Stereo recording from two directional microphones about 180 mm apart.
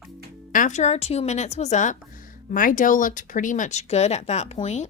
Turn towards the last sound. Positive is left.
turn(degrees=40)  # may be behind; listen again after turning